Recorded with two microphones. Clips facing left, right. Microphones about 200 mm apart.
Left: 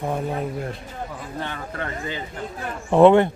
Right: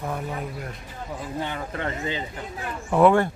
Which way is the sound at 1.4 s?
20° right (ahead or behind).